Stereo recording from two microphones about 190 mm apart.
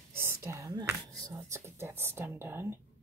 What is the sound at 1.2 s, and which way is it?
Speech, 15° right (ahead or behind).